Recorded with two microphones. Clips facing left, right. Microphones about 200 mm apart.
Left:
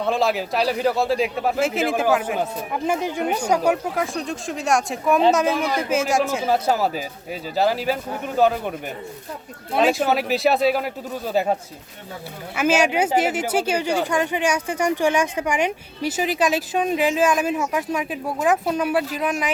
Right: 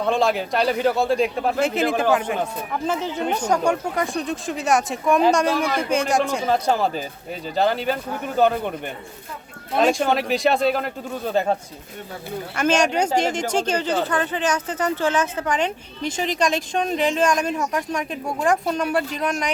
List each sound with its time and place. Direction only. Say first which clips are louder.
0.0 s speech: right 1 dB; centre (ahead or behind)
9.7 s speech: even; 5° left (ahead or behind)
12.5 s speech: left 1 dB; 5° left (ahead or behind)